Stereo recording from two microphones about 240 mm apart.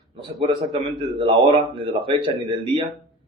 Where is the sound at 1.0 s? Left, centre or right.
Centre.